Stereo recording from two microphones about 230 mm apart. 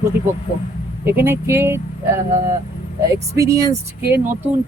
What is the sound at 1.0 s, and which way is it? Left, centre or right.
Speech, centre.